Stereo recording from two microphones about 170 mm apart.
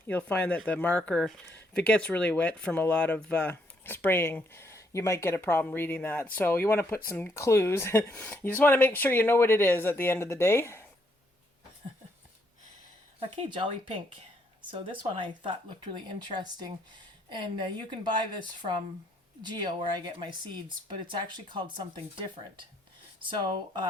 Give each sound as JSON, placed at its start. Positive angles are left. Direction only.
{"t": 0.1, "sound": "speech", "side_deg": 10}
{"t": 13.1, "sound": "a woman's voice", "side_deg": -30}